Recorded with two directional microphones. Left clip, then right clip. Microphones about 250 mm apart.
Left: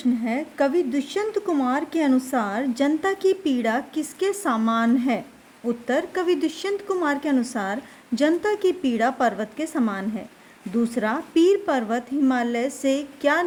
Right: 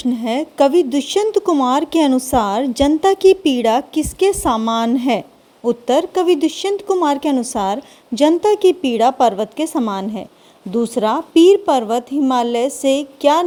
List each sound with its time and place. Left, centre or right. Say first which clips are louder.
0.0 s a woman's voice: right 6 dB; right